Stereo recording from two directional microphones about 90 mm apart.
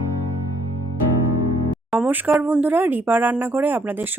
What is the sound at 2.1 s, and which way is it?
A woman's voice, 20° right (ahead or behind).